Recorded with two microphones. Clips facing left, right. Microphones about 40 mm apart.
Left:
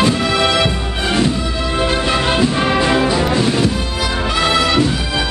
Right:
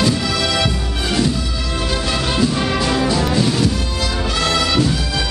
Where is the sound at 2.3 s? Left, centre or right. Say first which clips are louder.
Left 1 dB; left.